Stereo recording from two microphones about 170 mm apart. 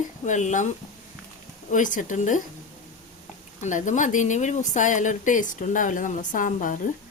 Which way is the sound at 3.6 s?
45° left (ahead or behind).